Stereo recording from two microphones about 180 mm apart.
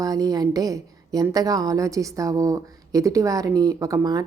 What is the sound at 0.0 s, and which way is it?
A woman's voice, 20° right (ahead or behind).